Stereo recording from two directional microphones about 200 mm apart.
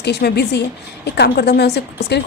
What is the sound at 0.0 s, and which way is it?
A woman's voice, 55° left (ahead or behind).